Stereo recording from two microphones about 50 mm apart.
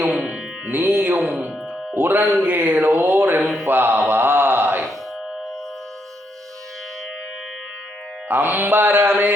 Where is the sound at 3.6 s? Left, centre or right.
Right.